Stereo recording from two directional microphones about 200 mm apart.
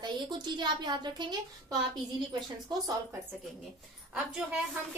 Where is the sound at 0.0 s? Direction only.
20° right (ahead or behind).